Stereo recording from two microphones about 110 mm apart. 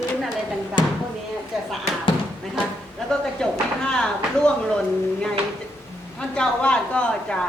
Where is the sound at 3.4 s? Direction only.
5° left (ahead or behind).